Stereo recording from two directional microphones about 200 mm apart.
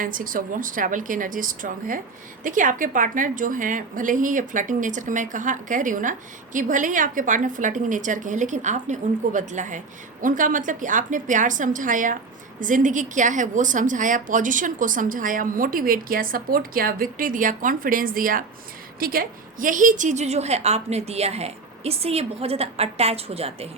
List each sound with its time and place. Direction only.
0.0 s a woman's voice: 45° right (ahead or behind)